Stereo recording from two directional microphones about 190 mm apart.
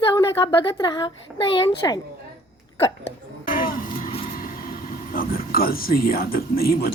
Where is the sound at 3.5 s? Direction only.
45° left (ahead or behind).